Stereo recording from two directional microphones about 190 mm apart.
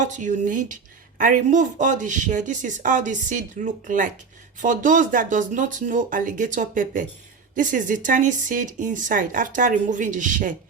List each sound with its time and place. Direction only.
0.0 s speech: 40° right (ahead or behind)